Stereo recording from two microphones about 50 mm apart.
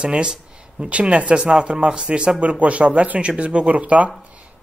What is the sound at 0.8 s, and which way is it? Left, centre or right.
A man's voice, right.